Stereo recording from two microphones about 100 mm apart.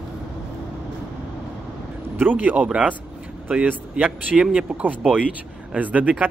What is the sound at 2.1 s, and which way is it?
Speech, 15° right (ahead or behind).